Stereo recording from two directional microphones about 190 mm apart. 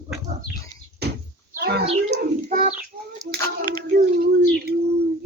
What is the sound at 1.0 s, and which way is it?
Door, 60° right (ahead or behind).